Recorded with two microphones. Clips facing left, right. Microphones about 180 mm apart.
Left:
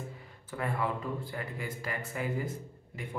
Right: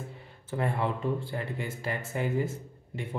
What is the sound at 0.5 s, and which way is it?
Speech, 25° right (ahead or behind).